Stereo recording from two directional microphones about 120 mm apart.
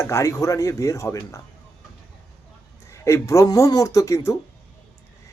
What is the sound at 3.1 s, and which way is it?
Speech, 25° left (ahead or behind).